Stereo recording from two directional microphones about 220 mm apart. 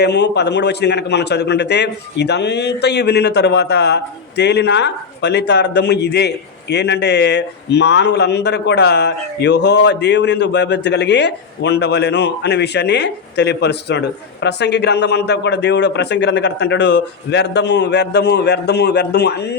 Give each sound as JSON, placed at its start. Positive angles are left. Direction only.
{"t": 0.0, "sound": "a man's voice", "side_deg": 50}